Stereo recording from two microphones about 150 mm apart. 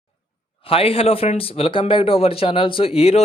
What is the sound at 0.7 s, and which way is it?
A man's voice, 40° left (ahead or behind).